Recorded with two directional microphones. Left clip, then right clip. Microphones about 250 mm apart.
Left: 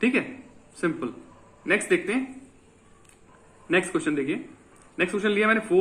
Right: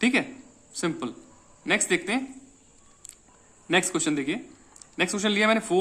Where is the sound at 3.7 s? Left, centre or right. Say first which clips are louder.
Even; right.